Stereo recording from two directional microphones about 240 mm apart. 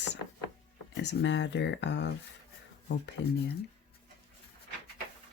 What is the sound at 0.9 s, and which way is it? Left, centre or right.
Speech, left.